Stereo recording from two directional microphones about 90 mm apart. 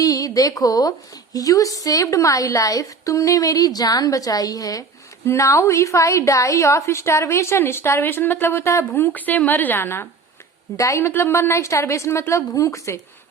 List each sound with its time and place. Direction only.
0.0 s a woman's voice: 45° left (ahead or behind)
8.9 s a woman's voice: 20° left (ahead or behind)